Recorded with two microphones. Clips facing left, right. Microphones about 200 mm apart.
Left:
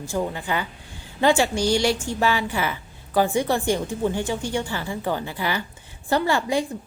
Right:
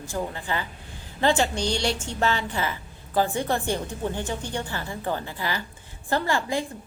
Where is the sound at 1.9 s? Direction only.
5° left (ahead or behind).